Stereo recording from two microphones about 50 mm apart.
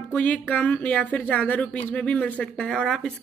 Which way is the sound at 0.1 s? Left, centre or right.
Left.